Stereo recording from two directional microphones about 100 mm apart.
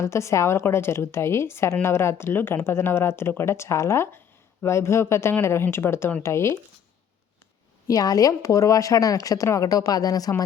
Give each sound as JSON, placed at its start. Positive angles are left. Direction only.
{"t": 0.0, "sound": "speech", "side_deg": 30}
{"t": 7.9, "sound": "speech", "side_deg": 35}